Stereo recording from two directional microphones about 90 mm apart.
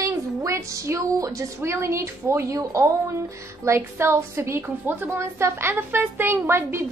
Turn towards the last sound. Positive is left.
turn(degrees=-25)  # may be behind; listen again after turning